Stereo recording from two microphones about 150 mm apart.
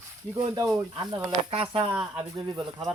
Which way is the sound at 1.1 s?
40° right (ahead or behind).